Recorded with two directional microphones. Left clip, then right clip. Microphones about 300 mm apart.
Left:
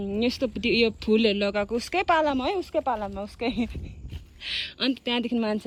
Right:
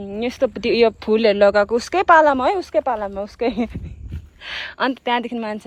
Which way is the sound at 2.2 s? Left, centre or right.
Centre.